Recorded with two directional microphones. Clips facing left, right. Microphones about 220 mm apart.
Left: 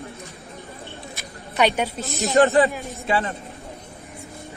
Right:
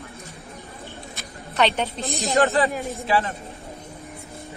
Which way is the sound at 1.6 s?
10° left (ahead or behind).